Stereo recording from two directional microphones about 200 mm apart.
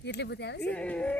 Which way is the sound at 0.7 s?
5° left (ahead or behind).